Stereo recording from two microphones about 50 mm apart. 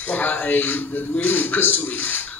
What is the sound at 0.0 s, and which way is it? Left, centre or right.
Speech, left.